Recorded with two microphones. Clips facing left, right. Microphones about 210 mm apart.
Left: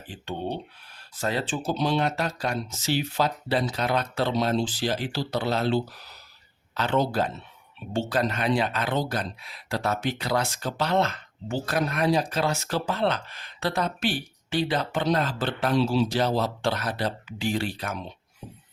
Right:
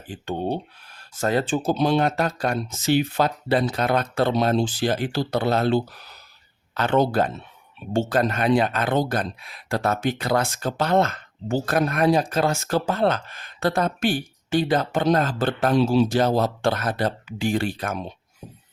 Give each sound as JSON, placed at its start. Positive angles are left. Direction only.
{"t": 0.1, "sound": "speech", "side_deg": -45}